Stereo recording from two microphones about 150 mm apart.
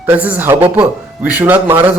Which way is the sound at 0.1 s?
15° right (ahead or behind).